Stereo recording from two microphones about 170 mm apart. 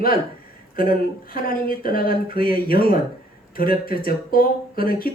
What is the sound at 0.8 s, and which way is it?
Speech, 60° left (ahead or behind).